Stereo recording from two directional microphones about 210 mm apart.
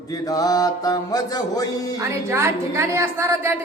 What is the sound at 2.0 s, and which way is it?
A woman's voice, 10° right (ahead or behind).